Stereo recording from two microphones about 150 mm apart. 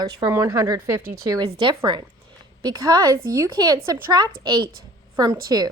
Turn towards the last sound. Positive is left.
turn(degrees=-25)  # may be behind; listen again after turning